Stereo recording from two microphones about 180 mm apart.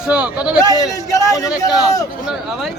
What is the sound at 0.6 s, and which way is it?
A man's voice, 20° left (ahead or behind).